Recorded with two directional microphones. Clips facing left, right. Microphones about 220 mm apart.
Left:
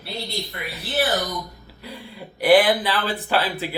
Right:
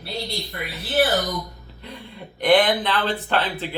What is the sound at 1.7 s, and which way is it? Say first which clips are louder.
Speech: left 1 dB; 10° left (ahead or behind).